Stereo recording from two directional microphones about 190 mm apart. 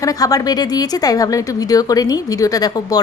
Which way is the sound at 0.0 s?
20° left (ahead or behind).